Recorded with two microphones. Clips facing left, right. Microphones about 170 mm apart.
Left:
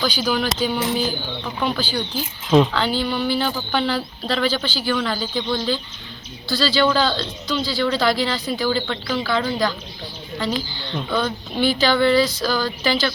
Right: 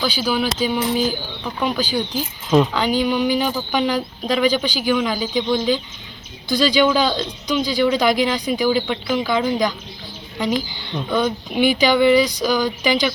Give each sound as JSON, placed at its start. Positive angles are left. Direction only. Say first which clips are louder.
{"t": 0.0, "sound": "speech", "louder": "right 1 dB", "side_deg": -5}
{"t": 11.1, "sound": "speech", "louder": "right 4 dB", "side_deg": -15}